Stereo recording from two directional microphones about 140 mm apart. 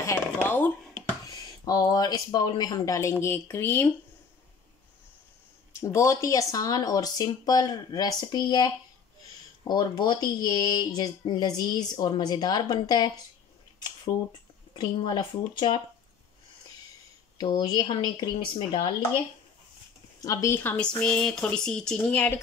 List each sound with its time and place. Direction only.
0.0 s a sound: 15° left (ahead or behind)
1.2 s speech: 30° left (ahead or behind)
5.7 s speech: 20° left (ahead or behind)
17.4 s speech: 30° left (ahead or behind)
20.2 s speech: 25° left (ahead or behind)